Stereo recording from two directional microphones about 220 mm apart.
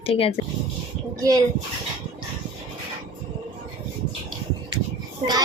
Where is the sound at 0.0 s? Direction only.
25° left (ahead or behind).